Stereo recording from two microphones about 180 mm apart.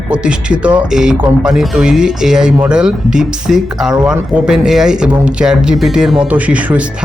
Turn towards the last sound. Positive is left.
turn(degrees=-5)  # may be behind; listen again after turning